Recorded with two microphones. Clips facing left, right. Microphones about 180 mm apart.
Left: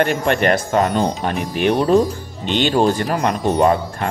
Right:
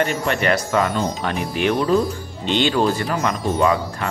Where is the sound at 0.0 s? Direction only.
55° left (ahead or behind).